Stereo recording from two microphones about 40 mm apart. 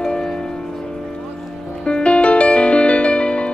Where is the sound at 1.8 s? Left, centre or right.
Left.